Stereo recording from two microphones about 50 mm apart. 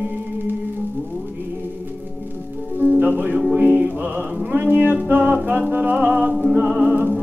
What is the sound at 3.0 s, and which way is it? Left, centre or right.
Music, right.